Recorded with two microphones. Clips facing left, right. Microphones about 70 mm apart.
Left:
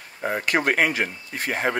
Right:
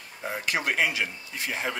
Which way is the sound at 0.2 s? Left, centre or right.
Left.